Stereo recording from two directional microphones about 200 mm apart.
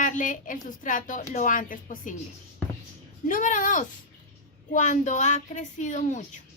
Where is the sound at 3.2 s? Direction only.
40° left (ahead or behind).